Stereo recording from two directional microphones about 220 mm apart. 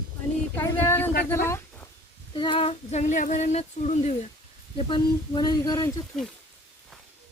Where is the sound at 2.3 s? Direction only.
25° left (ahead or behind).